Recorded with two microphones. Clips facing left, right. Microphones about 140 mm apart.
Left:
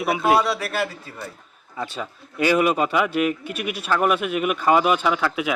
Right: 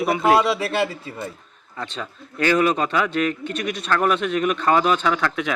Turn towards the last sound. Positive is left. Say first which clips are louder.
# even
turn(degrees=5)  # may be behind; listen again after turning